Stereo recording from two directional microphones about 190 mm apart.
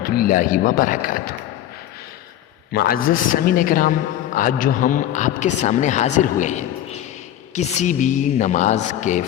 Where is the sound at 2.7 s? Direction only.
50° left (ahead or behind).